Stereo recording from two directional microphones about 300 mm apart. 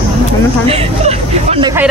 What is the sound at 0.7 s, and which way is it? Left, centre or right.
Speech, right.